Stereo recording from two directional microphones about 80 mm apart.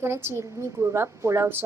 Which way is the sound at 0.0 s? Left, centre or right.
Right.